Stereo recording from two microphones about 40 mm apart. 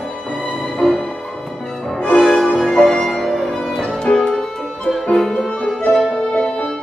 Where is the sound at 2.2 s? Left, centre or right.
Centre.